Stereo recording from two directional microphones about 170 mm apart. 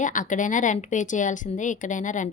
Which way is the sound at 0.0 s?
50° left (ahead or behind).